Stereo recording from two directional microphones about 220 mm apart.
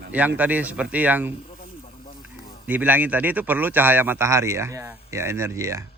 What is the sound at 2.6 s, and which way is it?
A man's voice, 10° right (ahead or behind).